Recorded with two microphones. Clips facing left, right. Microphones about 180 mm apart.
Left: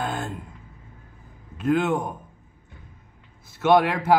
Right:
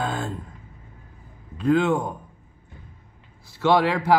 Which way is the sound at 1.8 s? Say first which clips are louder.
Right 2 dB; 20° left (ahead or behind).